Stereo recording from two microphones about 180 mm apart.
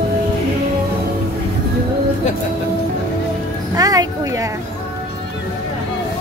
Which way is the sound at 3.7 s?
20° right (ahead or behind).